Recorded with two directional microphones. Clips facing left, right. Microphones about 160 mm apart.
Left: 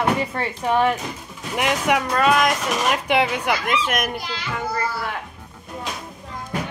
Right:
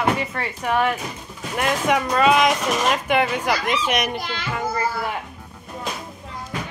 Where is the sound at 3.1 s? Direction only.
10° left (ahead or behind).